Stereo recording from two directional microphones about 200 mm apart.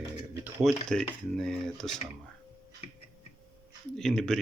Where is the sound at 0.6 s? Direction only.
Centre (ahead or behind).